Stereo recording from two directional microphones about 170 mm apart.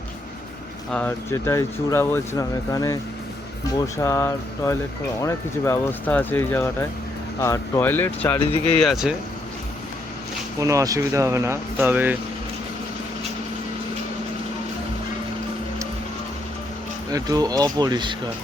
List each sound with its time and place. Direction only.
0.9 s speech: 10° left (ahead or behind)
8.8 s speech: centre (ahead or behind)
10.6 s speech: 20° right (ahead or behind)
17.1 s speech: 20° right (ahead or behind)